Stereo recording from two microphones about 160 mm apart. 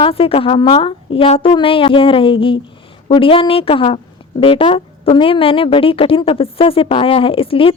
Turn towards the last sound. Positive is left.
turn(degrees=35)  # may be behind; listen again after turning